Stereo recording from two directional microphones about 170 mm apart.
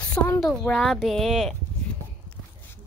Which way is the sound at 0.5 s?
Centre (ahead or behind).